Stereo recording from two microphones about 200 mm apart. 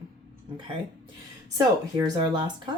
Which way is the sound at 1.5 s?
20° right (ahead or behind).